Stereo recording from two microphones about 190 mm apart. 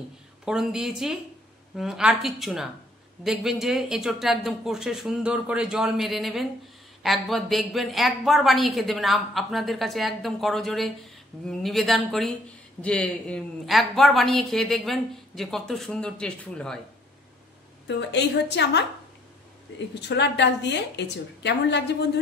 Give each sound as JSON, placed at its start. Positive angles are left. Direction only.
{"t": 0.5, "sound": "a woman's voice", "side_deg": -5}
{"t": 17.8, "sound": "a woman's voice", "side_deg": 65}
{"t": 20.1, "sound": "a woman's voice", "side_deg": 65}